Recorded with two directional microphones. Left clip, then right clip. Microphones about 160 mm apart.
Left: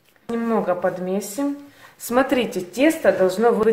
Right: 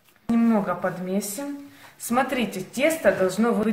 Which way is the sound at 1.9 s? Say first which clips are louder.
Left 5 dB; 35° left (ahead or behind).